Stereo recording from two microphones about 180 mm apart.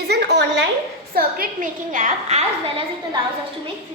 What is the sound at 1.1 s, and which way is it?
A woman's voice, 55° right (ahead or behind).